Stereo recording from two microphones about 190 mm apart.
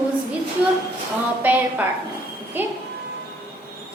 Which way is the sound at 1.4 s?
10° right (ahead or behind).